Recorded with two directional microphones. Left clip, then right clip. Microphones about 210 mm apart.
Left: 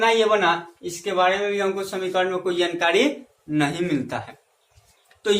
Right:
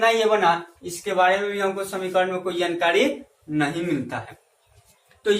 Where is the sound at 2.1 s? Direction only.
50° left (ahead or behind).